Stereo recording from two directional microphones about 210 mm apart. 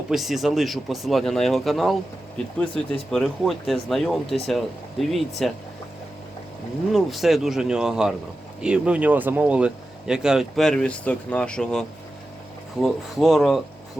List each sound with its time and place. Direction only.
0.1 s speech: centre (ahead or behind)
6.9 s speech: centre (ahead or behind)